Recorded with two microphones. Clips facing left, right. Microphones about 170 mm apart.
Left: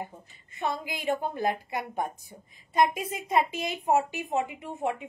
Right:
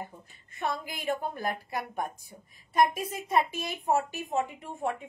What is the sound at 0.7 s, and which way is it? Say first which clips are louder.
A woman's voice: left 2 dB; 20° left (ahead or behind).